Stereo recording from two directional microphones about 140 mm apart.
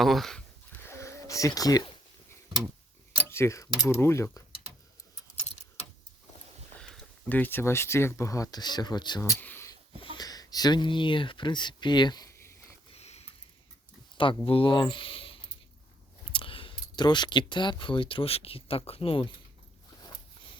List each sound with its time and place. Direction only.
0.0 s a sound: centre (ahead or behind); by 1.9 s 25° left (ahead or behind)
3.2 s speech: 20° left (ahead or behind)
6.7 s speech: 5° left (ahead or behind); by 9.2 s 30° left (ahead or behind)
9.4 s speech: 15° left (ahead or behind)
10.0 s speech: 35° left (ahead or behind)
12.9 s a sound: 50° left (ahead or behind)
14.2 s speech: 40° left (ahead or behind)